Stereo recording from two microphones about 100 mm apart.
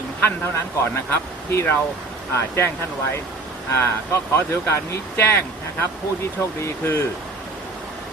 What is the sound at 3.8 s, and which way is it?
Speech, 25° left (ahead or behind).